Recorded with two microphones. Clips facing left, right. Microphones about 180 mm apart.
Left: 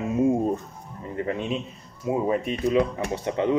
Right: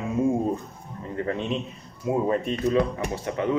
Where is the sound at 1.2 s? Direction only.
5° left (ahead or behind).